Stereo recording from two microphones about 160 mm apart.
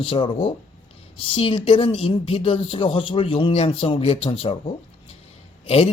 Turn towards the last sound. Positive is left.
turn(degrees=40)  # may be behind; listen again after turning